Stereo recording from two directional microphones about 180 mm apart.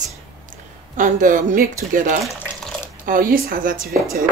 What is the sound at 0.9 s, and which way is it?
Speech, 45° right (ahead or behind).